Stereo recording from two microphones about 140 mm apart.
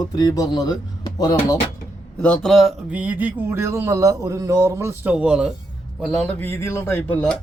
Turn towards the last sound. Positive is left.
turn(degrees=10)  # may be behind; listen again after turning